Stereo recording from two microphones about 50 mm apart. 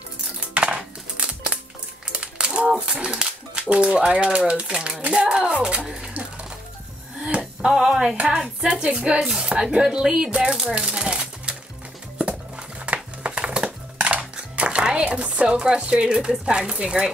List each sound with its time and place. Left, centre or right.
0.6 s music: right
2.1 s speech: centre
7.2 s speech: right
9.2 s speech: centre
12.2 s a sound: right